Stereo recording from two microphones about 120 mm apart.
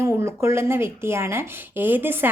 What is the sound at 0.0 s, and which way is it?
A woman's voice, 20° right (ahead or behind).